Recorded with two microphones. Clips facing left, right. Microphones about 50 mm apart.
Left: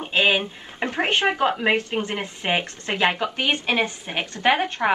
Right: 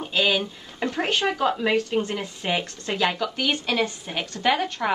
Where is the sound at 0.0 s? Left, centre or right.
Left.